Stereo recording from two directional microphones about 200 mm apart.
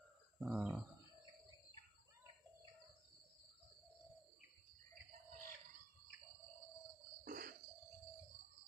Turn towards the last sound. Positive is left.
turn(degrees=-45)  # may be behind; listen again after turning